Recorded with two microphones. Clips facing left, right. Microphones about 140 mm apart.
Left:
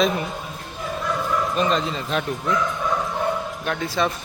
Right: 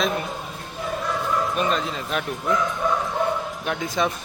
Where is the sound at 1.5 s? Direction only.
5° right (ahead or behind).